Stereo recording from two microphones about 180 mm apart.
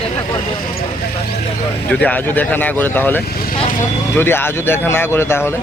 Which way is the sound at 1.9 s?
10° left (ahead or behind).